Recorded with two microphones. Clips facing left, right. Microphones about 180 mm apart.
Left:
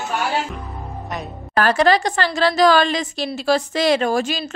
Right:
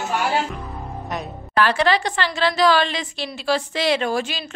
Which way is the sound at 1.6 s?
45° left (ahead or behind).